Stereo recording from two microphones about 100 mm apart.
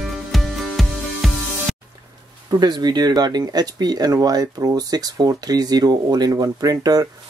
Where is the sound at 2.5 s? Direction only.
45° right (ahead or behind).